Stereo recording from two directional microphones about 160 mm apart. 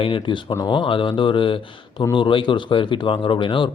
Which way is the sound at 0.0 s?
30° left (ahead or behind).